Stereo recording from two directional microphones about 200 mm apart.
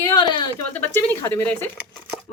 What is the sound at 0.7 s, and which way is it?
Speech, 10° left (ahead or behind).